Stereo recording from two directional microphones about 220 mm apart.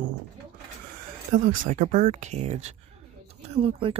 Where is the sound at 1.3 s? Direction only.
35° right (ahead or behind).